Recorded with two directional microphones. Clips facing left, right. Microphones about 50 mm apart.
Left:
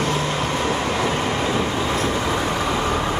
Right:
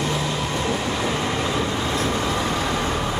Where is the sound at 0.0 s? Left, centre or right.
Left.